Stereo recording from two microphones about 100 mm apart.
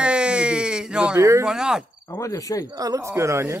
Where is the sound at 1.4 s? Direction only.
5° right (ahead or behind).